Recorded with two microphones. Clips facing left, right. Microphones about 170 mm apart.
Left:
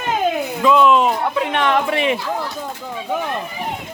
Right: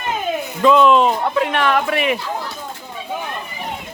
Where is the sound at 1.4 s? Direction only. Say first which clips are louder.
Right 1 dB; 20° left (ahead or behind).